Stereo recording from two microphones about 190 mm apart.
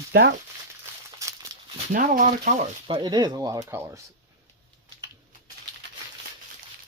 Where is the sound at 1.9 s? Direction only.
45° right (ahead or behind).